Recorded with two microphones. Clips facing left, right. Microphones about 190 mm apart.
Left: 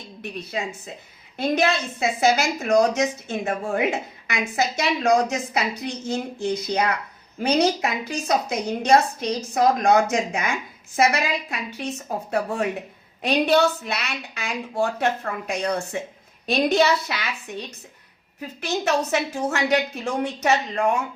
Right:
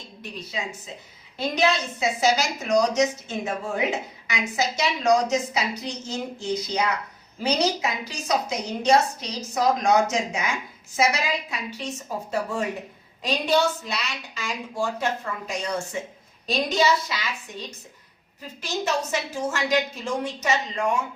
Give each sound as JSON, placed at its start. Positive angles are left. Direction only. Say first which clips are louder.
{"t": 0.2, "sound": "a woman's voice", "louder": "left 4 dB", "side_deg": 60}
{"t": 18.3, "sound": "a woman's voice", "louder": "left 3 dB", "side_deg": 60}